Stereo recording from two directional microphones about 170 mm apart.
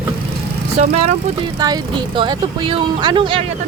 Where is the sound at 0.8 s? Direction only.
45° right (ahead or behind).